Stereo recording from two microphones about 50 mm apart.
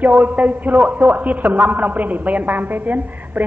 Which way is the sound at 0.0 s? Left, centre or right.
Right.